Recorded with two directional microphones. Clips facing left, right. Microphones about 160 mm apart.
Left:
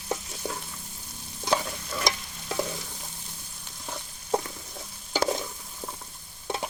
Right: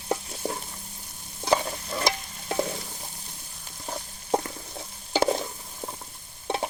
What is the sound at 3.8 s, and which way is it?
Stir, 35° right (ahead or behind).